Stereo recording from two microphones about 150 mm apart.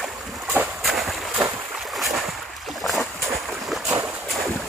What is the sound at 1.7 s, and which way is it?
Boat, centre (ahead or behind).